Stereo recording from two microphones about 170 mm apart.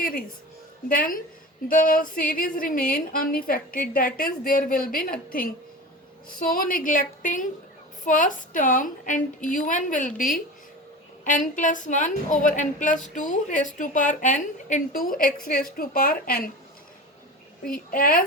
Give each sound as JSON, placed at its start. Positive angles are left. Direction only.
{"t": 0.9, "sound": "a woman's voice", "side_deg": 55}
{"t": 6.2, "sound": "a woman's voice", "side_deg": 60}
{"t": 17.7, "sound": "a woman's voice", "side_deg": 60}